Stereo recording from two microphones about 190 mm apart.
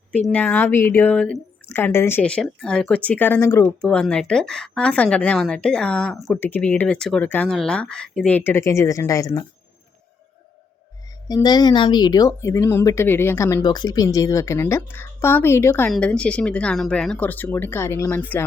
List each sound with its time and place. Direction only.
0.3 s speech: 10° left (ahead or behind)
11.3 s speech: 20° left (ahead or behind)